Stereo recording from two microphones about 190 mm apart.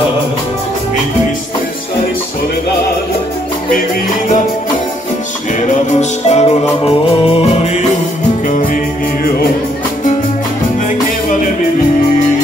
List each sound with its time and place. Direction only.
5.6 s music: 40° left (ahead or behind)